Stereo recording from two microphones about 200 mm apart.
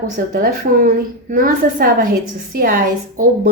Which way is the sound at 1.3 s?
45° right (ahead or behind).